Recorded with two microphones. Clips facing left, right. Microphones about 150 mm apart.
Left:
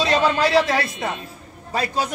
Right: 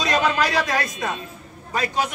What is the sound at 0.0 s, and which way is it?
Speech, 30° left (ahead or behind).